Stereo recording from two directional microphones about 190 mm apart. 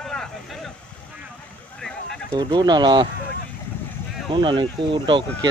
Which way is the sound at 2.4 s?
20° right (ahead or behind).